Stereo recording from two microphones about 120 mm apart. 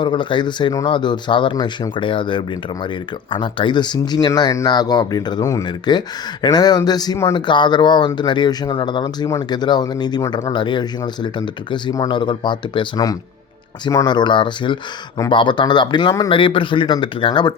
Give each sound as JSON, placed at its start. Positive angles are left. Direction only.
{"t": 0.0, "sound": "speech", "side_deg": 40}
{"t": 5.6, "sound": "speech", "side_deg": 35}
{"t": 7.3, "sound": "speech", "side_deg": 40}